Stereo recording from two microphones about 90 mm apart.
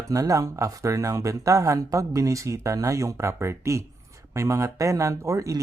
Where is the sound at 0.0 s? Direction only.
40° right (ahead or behind).